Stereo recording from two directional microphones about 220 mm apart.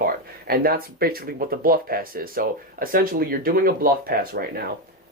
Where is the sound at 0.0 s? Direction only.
45° right (ahead or behind).